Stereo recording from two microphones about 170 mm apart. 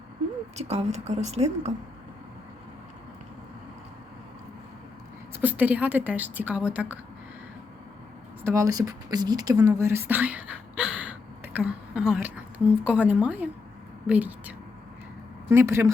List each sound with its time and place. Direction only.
0.5 s a woman's voice: 40° right (ahead or behind)
5.3 s a woman's voice: 10° right (ahead or behind)
8.4 s a woman's voice: 20° right (ahead or behind)